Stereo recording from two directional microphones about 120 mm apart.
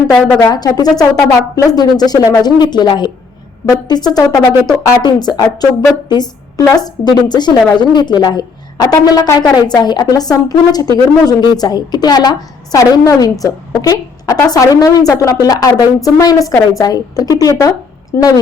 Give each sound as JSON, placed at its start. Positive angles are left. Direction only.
{"t": 0.4, "sound": "a woman's voice", "side_deg": 35}